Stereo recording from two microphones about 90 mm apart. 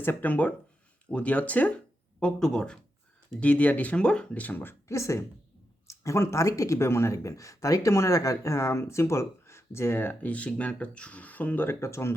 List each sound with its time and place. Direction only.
0.0 s speech: 20° left (ahead or behind)
2.1 s speech: 5° left (ahead or behind); by 12.1 s 30° left (ahead or behind)